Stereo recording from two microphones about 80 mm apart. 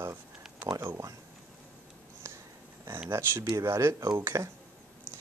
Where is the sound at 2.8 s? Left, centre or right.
Right.